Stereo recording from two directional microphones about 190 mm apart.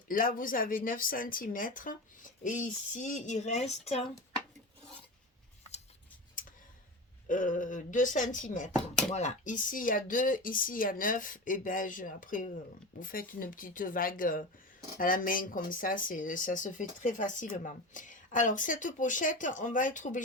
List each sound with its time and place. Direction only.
0.1 s speech: 45° left (ahead or behind)
7.3 s speech: 45° left (ahead or behind)